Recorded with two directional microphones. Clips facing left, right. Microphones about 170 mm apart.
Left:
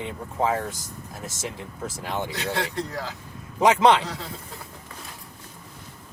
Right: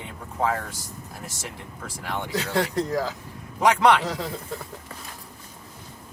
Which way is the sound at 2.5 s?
40° right (ahead or behind).